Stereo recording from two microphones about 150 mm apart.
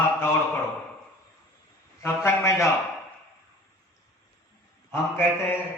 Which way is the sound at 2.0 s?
20° left (ahead or behind).